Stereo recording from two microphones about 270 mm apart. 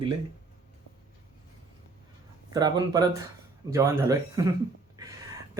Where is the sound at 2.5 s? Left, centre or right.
Centre.